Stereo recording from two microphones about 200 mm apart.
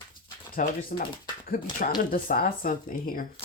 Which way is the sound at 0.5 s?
45° left (ahead or behind).